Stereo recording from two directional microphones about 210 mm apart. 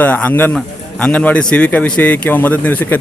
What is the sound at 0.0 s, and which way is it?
A man's voice, 5° left (ahead or behind).